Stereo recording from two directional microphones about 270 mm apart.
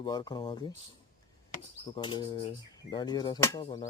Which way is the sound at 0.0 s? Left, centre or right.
Centre.